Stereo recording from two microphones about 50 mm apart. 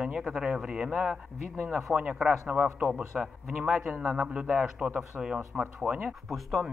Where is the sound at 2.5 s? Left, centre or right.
Right.